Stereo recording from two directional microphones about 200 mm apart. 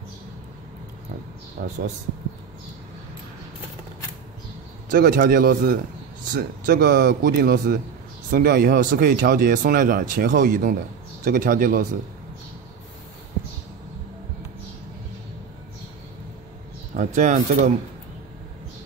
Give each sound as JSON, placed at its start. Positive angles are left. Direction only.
{"t": 1.6, "sound": "speech", "side_deg": -40}
{"t": 4.9, "sound": "speech", "side_deg": -45}
{"t": 6.9, "sound": "speech", "side_deg": -60}
{"t": 16.9, "sound": "speech", "side_deg": -40}